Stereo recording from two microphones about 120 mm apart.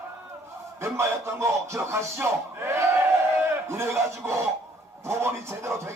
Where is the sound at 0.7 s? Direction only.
20° right (ahead or behind).